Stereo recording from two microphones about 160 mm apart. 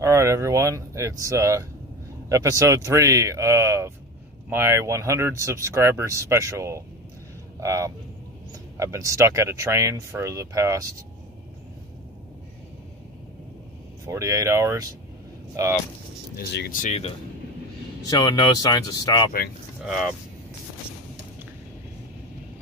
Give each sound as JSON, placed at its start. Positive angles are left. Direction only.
{"t": 0.0, "sound": "speech", "side_deg": -15}
{"t": 14.0, "sound": "speech", "side_deg": -20}
{"t": 16.3, "sound": "speech", "side_deg": 75}
{"t": 18.0, "sound": "speech", "side_deg": 25}
{"t": 19.8, "sound": "speech", "side_deg": 0}